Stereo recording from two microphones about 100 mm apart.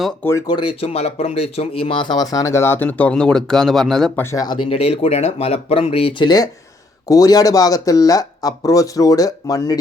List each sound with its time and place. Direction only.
0.2 s speech: 25° left (ahead or behind)
0.4 s speech: 50° left (ahead or behind)
0.8 s speech: 90° left; by 4.1 s 5° left (ahead or behind)
4.1 s speech: 25° left (ahead or behind)
4.4 s speech: 50° left (ahead or behind)
4.7 s speech: 75° left (ahead or behind)
6.1 s speech: 45° left (ahead or behind)